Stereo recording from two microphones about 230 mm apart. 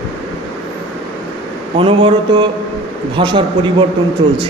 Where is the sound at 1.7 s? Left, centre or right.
Right.